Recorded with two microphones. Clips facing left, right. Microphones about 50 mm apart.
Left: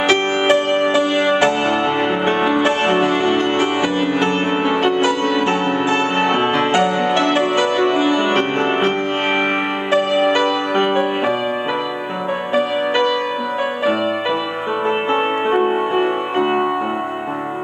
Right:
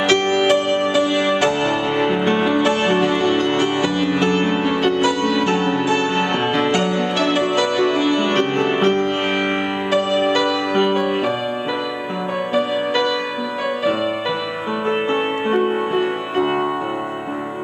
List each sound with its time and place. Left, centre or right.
0.1 s music: left
15.5 s music: centre